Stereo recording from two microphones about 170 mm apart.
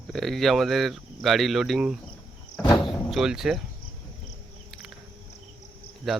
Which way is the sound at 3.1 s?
5° right (ahead or behind).